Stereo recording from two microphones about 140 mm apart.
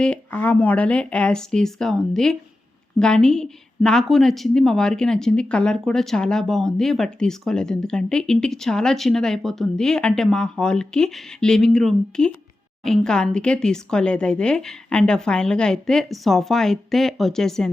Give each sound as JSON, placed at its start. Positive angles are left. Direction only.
{"t": 0.0, "sound": "a woman's voice", "side_deg": 10}